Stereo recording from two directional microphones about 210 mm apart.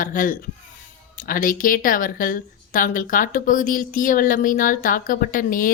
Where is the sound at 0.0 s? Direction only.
40° left (ahead or behind).